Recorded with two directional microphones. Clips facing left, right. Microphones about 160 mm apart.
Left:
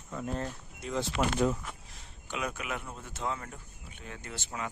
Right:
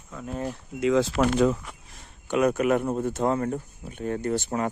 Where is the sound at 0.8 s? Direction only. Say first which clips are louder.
Right 10 dB; 90° right.